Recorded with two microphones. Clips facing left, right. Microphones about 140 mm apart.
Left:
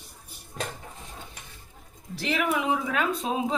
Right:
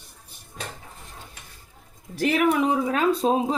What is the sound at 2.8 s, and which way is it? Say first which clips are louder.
Speech: right 6 dB; 35° right (ahead or behind).